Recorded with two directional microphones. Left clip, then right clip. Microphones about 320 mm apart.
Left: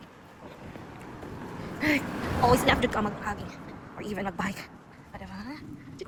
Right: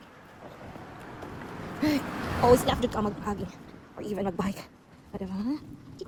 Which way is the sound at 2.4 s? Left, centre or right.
Centre.